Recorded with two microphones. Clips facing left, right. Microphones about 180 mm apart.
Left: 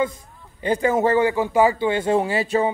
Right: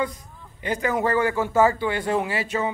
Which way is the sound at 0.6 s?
30° left (ahead or behind).